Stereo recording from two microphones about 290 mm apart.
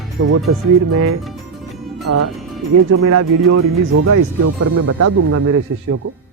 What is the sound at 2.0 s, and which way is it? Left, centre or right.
Speech, right.